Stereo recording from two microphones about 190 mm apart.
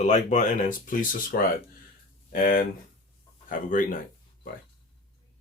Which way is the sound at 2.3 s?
45° left (ahead or behind).